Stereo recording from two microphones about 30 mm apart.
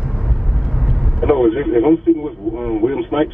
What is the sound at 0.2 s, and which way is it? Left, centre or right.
Vehicle, centre.